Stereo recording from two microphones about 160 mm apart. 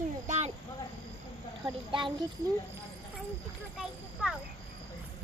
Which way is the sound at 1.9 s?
30° right (ahead or behind).